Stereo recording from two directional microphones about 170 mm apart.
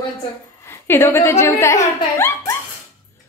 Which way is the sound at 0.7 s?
15° left (ahead or behind).